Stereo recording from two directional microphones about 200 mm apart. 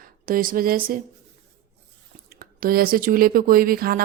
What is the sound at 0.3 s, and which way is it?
Speech, 45° right (ahead or behind).